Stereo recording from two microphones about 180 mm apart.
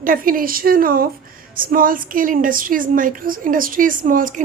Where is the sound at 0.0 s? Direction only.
50° right (ahead or behind).